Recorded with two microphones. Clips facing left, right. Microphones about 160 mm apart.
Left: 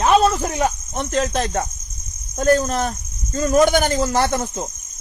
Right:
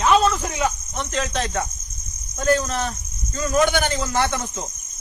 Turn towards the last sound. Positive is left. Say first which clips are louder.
# left 3 dB
turn(degrees=40)  # may be behind; listen again after turning